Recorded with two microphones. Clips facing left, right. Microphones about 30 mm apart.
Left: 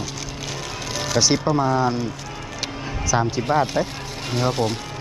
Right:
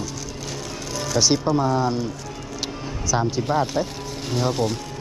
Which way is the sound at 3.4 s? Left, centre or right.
Centre.